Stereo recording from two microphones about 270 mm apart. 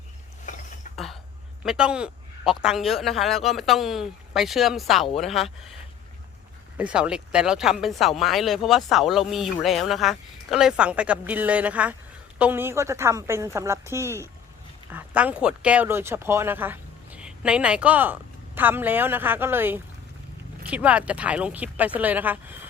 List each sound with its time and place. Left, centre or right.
0.9 s a sound: centre
1.6 s speech: centre
6.7 s speech: centre